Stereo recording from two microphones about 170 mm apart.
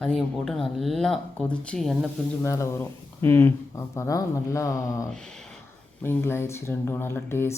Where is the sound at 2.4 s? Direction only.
15° left (ahead or behind).